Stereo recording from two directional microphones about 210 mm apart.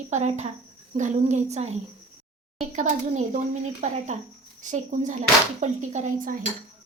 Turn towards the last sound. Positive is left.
turn(degrees=-35)  # may be behind; listen again after turning